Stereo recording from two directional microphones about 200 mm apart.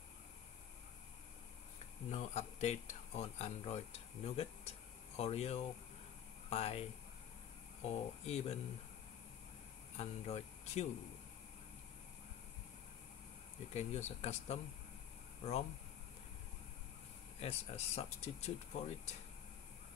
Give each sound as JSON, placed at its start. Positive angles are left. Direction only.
{"t": 2.0, "sound": "speech", "side_deg": 35}
{"t": 7.8, "sound": "speech", "side_deg": 35}
{"t": 9.9, "sound": "speech", "side_deg": 30}
{"t": 13.7, "sound": "speech", "side_deg": 35}
{"t": 17.4, "sound": "speech", "side_deg": 30}